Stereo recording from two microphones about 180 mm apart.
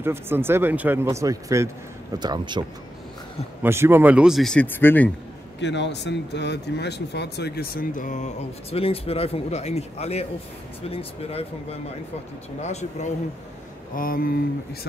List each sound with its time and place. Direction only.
0.0 s speech: 15° right (ahead or behind)
3.6 s speech: 15° right (ahead or behind); by 5.1 s 10° left (ahead or behind)
5.6 s speech: 75° left (ahead or behind); by 13.1 s 40° left (ahead or behind)
13.9 s speech: 50° left (ahead or behind)